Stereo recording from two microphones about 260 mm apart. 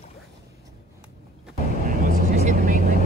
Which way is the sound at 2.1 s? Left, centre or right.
Right.